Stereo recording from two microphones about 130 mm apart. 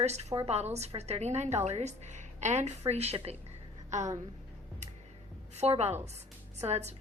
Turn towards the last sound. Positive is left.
turn(degrees=-55)  # may be behind; listen again after turning